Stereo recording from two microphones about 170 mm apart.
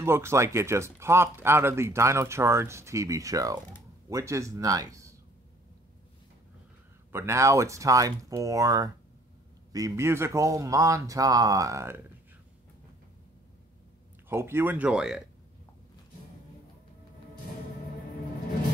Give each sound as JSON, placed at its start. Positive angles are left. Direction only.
{"t": 0.0, "sound": "speech", "side_deg": -15}
{"t": 7.1, "sound": "speech", "side_deg": -15}
{"t": 14.3, "sound": "speech", "side_deg": -15}